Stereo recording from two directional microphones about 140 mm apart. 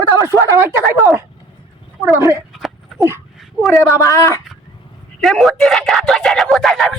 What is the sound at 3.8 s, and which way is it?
Speech, 20° left (ahead or behind).